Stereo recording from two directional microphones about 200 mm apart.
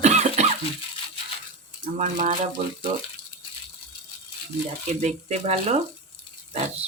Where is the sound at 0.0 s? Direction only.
35° right (ahead or behind).